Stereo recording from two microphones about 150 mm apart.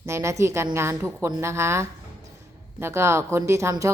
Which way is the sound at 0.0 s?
20° right (ahead or behind).